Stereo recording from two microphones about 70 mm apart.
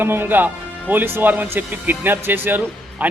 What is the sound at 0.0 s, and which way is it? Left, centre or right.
Speech, right.